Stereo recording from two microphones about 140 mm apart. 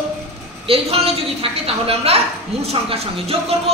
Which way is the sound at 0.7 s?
45° right (ahead or behind).